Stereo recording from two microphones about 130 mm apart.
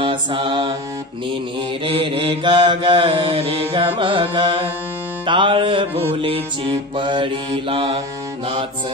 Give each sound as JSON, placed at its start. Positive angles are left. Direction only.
{"t": 0.0, "sound": "mantra", "side_deg": -40}
{"t": 1.9, "sound": "mantra", "side_deg": -40}
{"t": 5.2, "sound": "music", "side_deg": -40}